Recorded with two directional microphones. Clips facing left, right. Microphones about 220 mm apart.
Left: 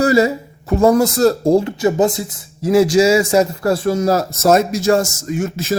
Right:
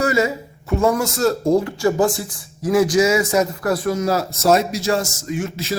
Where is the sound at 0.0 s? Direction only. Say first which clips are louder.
Left 5 dB; 35° left (ahead or behind).